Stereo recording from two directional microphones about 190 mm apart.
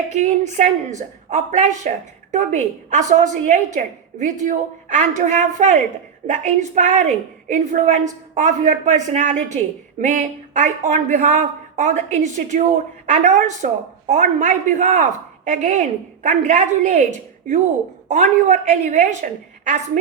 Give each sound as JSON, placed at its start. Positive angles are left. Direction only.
{"t": 0.1, "sound": "a woman's voice", "side_deg": -40}
{"t": 18.1, "sound": "a woman's voice", "side_deg": -40}